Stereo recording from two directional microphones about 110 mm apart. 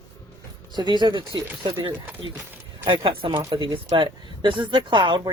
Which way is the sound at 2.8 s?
50° right (ahead or behind).